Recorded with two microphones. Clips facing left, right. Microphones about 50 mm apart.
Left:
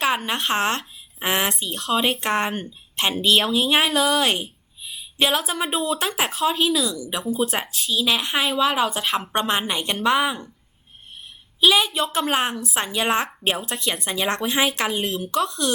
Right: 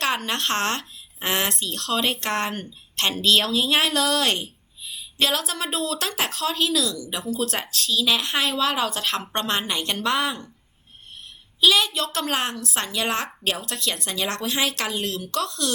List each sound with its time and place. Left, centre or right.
0.0 s speech: centre
11.6 s speech: centre